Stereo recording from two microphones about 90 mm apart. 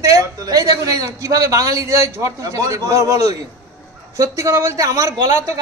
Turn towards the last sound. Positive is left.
turn(degrees=-35)  # may be behind; listen again after turning